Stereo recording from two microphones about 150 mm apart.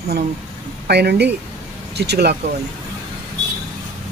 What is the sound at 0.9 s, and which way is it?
Speech, 90° right.